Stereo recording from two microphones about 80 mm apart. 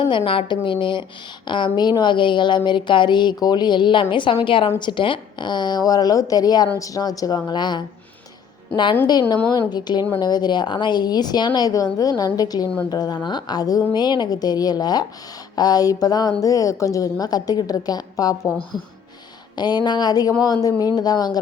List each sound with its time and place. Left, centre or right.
0.1 s a woman's voice: left
1.5 s a woman's voice: left
8.7 s a woman's voice: left
9.5 s a woman's voice: left
19.5 s a woman's voice: left